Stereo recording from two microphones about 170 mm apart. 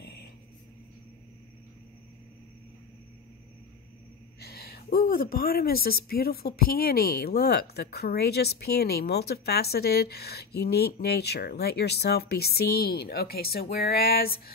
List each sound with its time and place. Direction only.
4.4 s a woman's voice: 65° left (ahead or behind)